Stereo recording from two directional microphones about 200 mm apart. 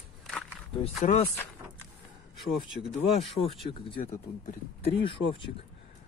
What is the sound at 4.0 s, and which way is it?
Speech, 40° left (ahead or behind).